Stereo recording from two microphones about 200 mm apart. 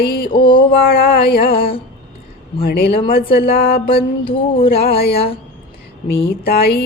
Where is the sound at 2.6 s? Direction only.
50° left (ahead or behind).